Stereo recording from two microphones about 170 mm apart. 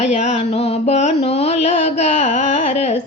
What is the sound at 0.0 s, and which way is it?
Music, 40° left (ahead or behind).